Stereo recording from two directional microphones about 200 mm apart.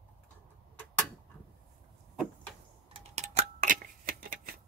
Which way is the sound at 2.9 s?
30° right (ahead or behind).